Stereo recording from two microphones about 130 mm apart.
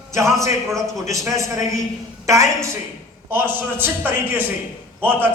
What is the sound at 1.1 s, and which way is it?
A man's voice, 25° right (ahead or behind).